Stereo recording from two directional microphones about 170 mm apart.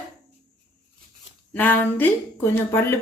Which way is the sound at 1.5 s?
10° left (ahead or behind).